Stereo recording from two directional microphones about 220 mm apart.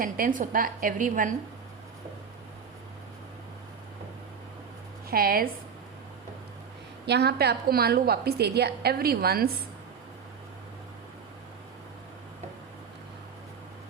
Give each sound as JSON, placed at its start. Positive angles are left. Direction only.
{"t": 0.0, "sound": "a woman's voice", "side_deg": -40}
{"t": 5.1, "sound": "a woman's voice", "side_deg": -40}
{"t": 7.0, "sound": "a woman's voice", "side_deg": -50}